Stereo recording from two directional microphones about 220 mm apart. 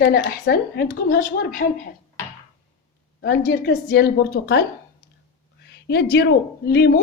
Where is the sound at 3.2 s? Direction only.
40° left (ahead or behind).